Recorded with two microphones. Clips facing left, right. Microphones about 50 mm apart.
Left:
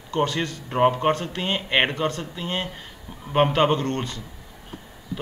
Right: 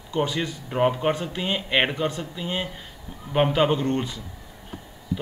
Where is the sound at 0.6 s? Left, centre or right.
Centre.